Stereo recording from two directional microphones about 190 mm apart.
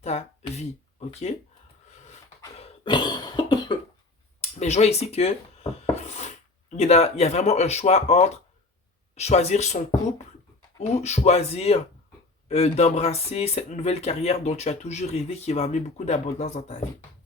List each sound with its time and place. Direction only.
0.0 s a sound: 35° left (ahead or behind)
2.6 s cough: 25° left (ahead or behind)
4.4 s dishes: 35° left (ahead or behind)
9.1 s speech: 35° left (ahead or behind)